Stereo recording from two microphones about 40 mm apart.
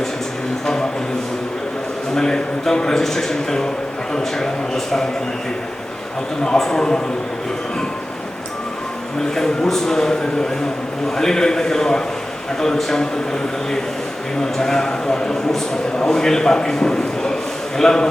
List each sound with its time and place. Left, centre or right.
0.6 s a sound: centre
2.1 s a man's voice: centre
6.6 s a man's voice: centre
9.3 s a man's voice: centre
11.2 s a man's voice: centre
14.4 s a man's voice: centre